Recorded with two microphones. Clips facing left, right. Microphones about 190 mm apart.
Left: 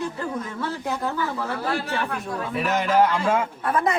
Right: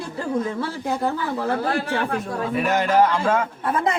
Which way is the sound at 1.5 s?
50° right (ahead or behind).